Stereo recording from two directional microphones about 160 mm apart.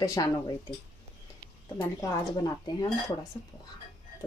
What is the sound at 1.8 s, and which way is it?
Speech, 20° left (ahead or behind).